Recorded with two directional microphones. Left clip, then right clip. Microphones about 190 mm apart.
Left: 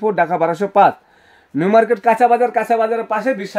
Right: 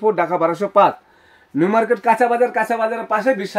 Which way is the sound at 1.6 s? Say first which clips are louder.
Left 3 dB; 35° left (ahead or behind).